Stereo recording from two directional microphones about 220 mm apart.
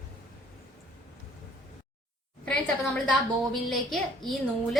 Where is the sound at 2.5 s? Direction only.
Centre (ahead or behind).